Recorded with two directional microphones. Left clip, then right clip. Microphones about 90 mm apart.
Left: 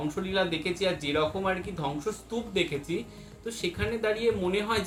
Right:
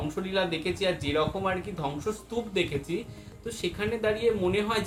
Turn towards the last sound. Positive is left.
turn(degrees=20)  # may be behind; listen again after turning